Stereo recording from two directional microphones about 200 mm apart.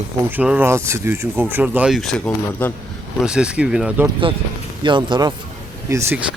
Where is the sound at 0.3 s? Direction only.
10° right (ahead or behind).